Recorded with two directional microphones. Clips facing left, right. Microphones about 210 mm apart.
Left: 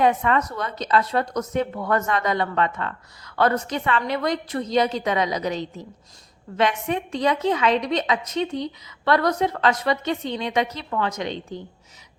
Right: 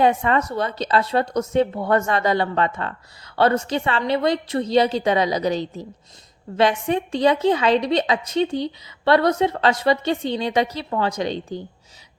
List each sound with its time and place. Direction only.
0.0 s a woman's voice: 30° right (ahead or behind)